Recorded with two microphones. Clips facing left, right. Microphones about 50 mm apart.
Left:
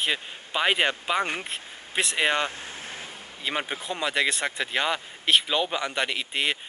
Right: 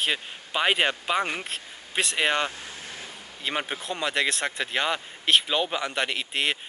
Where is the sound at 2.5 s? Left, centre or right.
Left.